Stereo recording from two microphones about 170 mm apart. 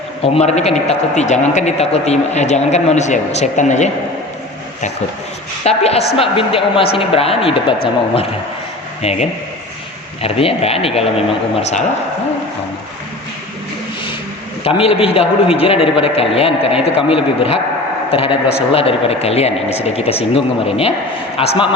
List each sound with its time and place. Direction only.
0.2 s a man's voice: 40° left (ahead or behind)
5.6 s a man's voice: 35° left (ahead or behind)
9.0 s speech: 40° left (ahead or behind)
10.2 s a man's voice: 35° left (ahead or behind)
14.6 s a man's voice: 35° left (ahead or behind)